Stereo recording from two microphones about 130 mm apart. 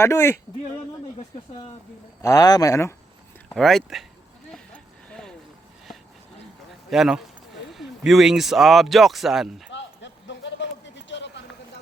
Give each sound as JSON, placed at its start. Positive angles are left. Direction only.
{"t": 0.0, "sound": "a man's voice", "side_deg": 20}
{"t": 2.2, "sound": "a man's voice", "side_deg": 30}
{"t": 3.5, "sound": "speech", "side_deg": 5}
{"t": 4.5, "sound": "a sound", "side_deg": 5}
{"t": 6.9, "sound": "speech", "side_deg": 0}